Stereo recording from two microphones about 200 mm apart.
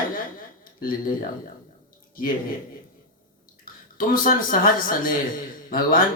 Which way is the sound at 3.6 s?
45° left (ahead or behind).